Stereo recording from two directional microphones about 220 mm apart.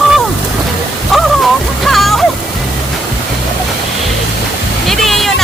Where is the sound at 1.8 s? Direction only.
Centre (ahead or behind).